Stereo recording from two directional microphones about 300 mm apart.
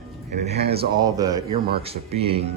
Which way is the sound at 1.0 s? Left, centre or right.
Centre.